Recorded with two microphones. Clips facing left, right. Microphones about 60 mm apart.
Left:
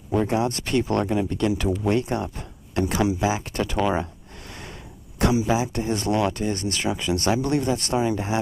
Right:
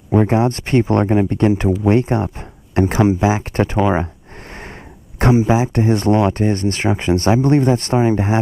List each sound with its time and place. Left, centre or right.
0.1 s speech: right
5.2 s speech: right